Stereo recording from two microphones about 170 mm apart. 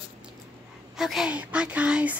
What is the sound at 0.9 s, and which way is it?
A woman's voice, centre (ahead or behind).